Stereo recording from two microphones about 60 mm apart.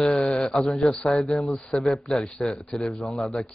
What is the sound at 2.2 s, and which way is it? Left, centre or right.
Speech, centre.